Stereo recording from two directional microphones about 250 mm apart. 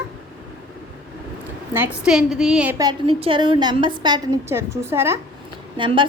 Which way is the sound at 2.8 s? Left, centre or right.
Centre.